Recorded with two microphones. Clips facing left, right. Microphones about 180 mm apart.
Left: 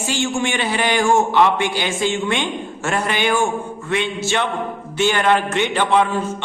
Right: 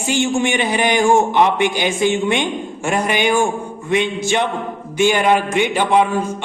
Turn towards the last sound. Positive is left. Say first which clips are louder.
# right 2 dB
turn(degrees=-10)  # may be behind; listen again after turning